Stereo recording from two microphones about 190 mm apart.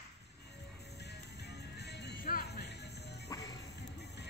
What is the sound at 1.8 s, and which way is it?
Music, 60° left (ahead or behind).